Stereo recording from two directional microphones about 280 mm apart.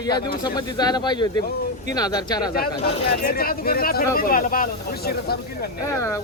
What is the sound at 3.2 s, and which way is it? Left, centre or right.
Speech, left.